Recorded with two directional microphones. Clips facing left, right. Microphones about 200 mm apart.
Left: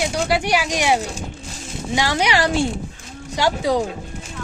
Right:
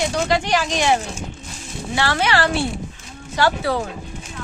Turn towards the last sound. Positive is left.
turn(degrees=15)  # may be behind; listen again after turning